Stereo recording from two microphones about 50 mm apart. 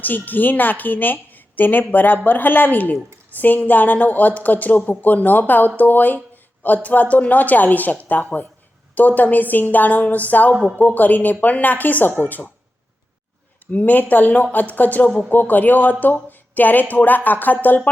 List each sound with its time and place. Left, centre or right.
0.0 s a woman's voice: left
6.3 s a sound: left
6.8 s a woman's voice: left
13.7 s a woman's voice: left
16.3 s a sound: left
16.9 s a woman's voice: left